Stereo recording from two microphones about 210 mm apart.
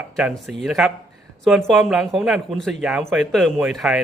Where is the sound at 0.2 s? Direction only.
Centre (ahead or behind).